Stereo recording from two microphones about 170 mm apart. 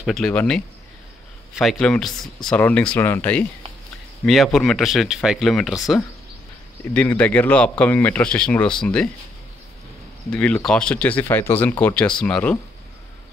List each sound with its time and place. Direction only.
0.0 s speech: centre (ahead or behind)
6.8 s speech: 10° left (ahead or behind)
10.3 s speech: 5° left (ahead or behind)